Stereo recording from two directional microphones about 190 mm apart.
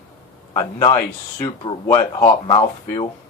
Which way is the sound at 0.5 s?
20° left (ahead or behind).